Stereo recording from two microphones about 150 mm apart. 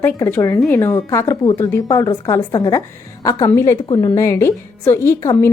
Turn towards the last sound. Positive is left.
turn(degrees=20)  # may be behind; listen again after turning